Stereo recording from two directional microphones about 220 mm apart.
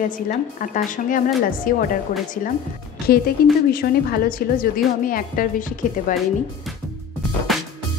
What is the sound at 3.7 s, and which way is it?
A woman's voice, 40° left (ahead or behind).